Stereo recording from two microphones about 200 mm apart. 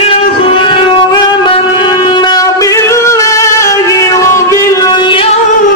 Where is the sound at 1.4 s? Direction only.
25° left (ahead or behind).